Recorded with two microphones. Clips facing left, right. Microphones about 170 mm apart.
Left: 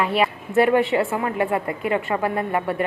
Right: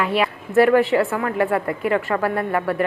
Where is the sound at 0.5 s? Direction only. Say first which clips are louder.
Right 3 dB; 20° left (ahead or behind).